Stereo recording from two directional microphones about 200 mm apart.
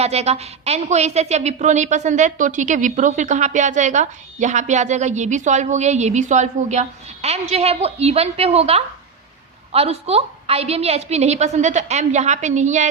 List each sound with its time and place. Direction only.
0.0 s a woman's voice: 30° right (ahead or behind)